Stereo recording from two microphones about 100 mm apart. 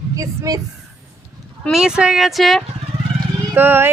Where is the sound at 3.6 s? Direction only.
20° right (ahead or behind).